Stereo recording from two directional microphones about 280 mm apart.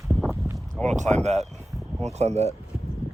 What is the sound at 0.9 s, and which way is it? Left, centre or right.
Speech, right.